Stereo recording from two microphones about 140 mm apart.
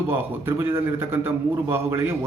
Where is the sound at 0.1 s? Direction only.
15° right (ahead or behind).